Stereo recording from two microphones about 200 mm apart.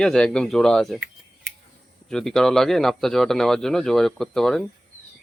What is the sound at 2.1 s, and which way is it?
Speech, centre (ahead or behind).